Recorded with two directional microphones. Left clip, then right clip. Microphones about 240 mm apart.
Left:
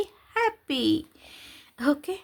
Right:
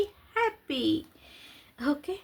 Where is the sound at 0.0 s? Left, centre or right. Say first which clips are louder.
Left 2 dB; left.